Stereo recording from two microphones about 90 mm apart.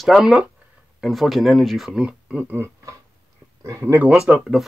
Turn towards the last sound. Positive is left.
turn(degrees=-5)  # may be behind; listen again after turning